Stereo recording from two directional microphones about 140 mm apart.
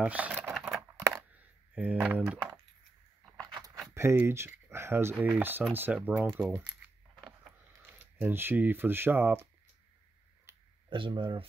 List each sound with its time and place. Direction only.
0.0 s speech: 10° right (ahead or behind)
0.5 s a sound: centre (ahead or behind)
1.1 s coin: 10° right (ahead or behind)
3.3 s keys jangling: 25° right (ahead or behind)
3.9 s speech: 20° right (ahead or behind)
7.8 s speech: 15° right (ahead or behind)
10.9 s speech: 35° right (ahead or behind)